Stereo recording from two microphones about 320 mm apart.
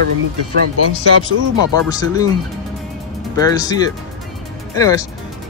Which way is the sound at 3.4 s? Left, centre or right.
Centre.